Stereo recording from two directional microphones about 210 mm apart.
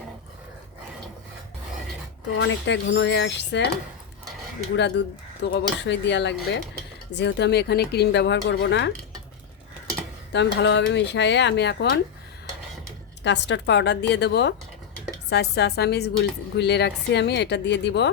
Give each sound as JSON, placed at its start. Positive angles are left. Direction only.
{"t": 2.4, "sound": "speech", "side_deg": 60}
{"t": 4.8, "sound": "a woman's voice", "side_deg": 55}
{"t": 10.3, "sound": "speech", "side_deg": 55}
{"t": 13.2, "sound": "a woman's voice", "side_deg": 55}